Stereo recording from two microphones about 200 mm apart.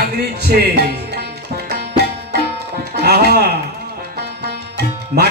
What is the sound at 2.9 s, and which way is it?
Speech, 55° right (ahead or behind).